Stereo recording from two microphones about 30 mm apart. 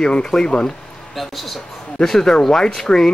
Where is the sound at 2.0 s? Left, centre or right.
Centre.